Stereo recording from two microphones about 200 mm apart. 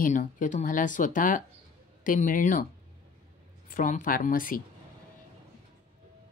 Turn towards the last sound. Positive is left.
turn(degrees=45)  # may be behind; listen again after turning